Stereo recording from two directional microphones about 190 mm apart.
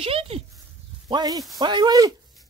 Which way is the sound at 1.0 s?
20° right (ahead or behind).